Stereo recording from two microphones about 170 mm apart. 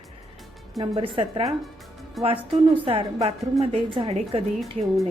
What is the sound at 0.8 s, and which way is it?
Speech, 30° right (ahead or behind).